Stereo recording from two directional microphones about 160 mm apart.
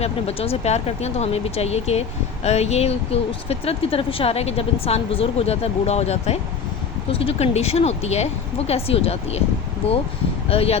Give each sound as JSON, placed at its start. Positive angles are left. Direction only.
{"t": 0.0, "sound": "speech", "side_deg": 40}
{"t": 10.5, "sound": "speech", "side_deg": 35}